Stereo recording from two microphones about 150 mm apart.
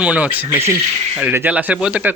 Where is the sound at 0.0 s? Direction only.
10° right (ahead or behind).